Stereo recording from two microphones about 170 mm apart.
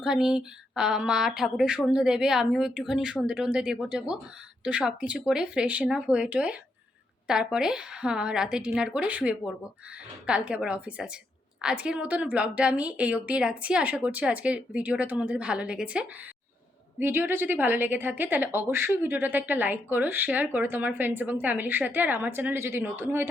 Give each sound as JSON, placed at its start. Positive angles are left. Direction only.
{"t": 0.0, "sound": "a woman's voice", "side_deg": -5}